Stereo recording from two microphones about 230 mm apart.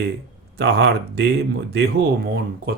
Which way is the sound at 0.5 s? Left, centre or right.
Right.